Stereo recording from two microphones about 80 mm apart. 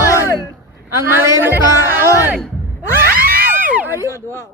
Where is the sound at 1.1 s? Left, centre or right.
Right.